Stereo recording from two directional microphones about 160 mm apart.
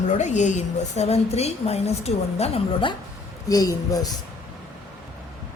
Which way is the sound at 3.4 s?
20° left (ahead or behind).